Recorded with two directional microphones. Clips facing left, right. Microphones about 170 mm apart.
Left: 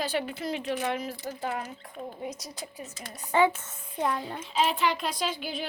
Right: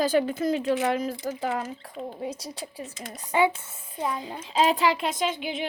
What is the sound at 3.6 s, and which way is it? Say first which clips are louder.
Speech: left 1 dB; 5° right (ahead or behind).